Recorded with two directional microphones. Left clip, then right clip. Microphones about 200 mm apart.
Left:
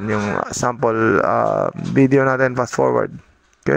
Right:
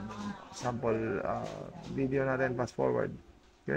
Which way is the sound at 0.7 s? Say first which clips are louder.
Left 15 dB; 45° left (ahead or behind).